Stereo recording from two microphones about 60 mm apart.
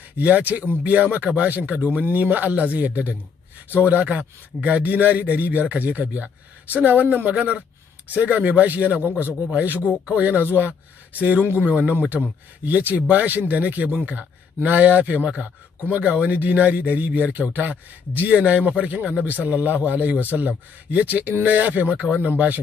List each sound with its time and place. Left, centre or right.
0.2 s speech: right